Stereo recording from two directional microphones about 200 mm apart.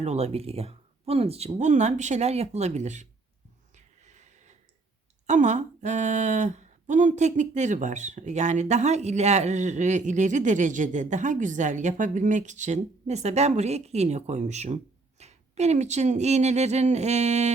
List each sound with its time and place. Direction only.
0.0 s speech: 35° right (ahead or behind)
3.8 s a sound: 35° right (ahead or behind)
5.2 s speech: 35° right (ahead or behind)